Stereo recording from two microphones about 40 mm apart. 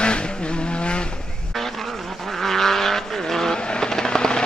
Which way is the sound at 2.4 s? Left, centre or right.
Centre.